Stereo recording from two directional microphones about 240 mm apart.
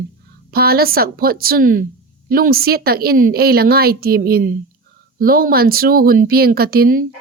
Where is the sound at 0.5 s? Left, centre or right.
Right.